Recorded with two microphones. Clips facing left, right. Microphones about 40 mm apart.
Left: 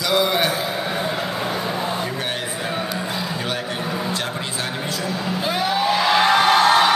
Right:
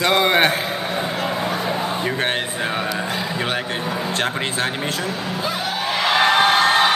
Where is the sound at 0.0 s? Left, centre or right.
Right.